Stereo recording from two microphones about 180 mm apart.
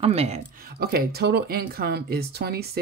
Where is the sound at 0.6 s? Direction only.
60° right (ahead or behind).